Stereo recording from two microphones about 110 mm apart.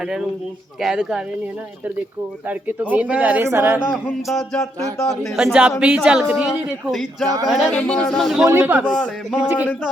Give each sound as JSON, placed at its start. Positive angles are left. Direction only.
{"t": 0.8, "sound": "speech", "side_deg": -5}
{"t": 2.5, "sound": "speech", "side_deg": -15}
{"t": 3.9, "sound": "speech", "side_deg": 0}
{"t": 5.4, "sound": "speech", "side_deg": -10}
{"t": 7.7, "sound": "speech", "side_deg": 10}
{"t": 8.4, "sound": "speech", "side_deg": -15}
{"t": 8.9, "sound": "speech", "side_deg": 5}
{"t": 9.3, "sound": "speech", "side_deg": -10}